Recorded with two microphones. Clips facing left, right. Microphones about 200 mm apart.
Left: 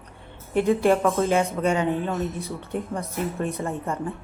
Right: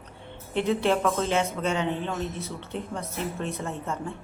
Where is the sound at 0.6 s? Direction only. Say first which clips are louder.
Left 5 dB; 50° left (ahead or behind).